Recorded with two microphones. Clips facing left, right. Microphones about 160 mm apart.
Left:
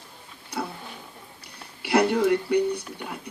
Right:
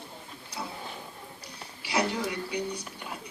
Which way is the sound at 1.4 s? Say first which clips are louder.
Left 2 dB; 60° left (ahead or behind).